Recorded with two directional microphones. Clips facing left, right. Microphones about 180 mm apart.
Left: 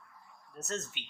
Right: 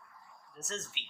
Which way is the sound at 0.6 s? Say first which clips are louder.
Left 4 dB; 45° left (ahead or behind).